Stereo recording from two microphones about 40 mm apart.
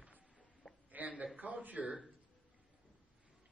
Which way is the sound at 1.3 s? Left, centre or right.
Right.